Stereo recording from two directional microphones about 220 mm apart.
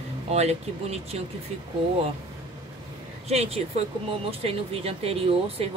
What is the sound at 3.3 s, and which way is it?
Speech, 30° right (ahead or behind).